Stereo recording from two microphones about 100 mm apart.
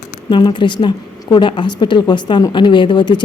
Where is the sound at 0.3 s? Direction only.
50° left (ahead or behind).